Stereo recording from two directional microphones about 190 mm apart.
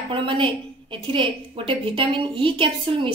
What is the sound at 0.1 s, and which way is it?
A woman's voice, 25° right (ahead or behind).